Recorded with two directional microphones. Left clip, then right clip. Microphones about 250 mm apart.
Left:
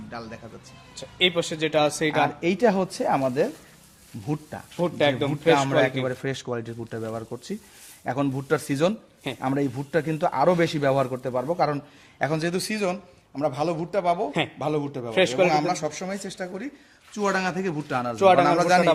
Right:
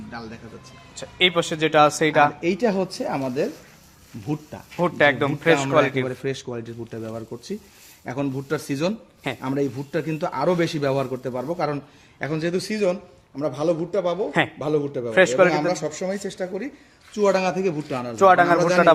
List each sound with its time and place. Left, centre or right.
0.9 s a man's voice: centre
2.4 s a man's voice: left
4.8 s a man's voice: centre
6.1 s a man's voice: left
12.2 s a man's voice: left
18.2 s a man's voice: centre
18.4 s a man's voice: left